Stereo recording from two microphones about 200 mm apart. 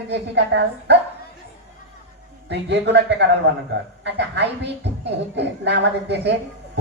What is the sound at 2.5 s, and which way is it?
A woman's voice, 60° right (ahead or behind).